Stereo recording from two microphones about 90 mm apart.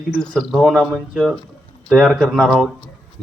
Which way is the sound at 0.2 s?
Centre (ahead or behind).